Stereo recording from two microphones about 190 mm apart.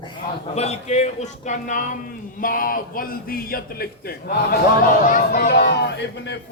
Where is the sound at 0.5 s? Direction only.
35° left (ahead or behind).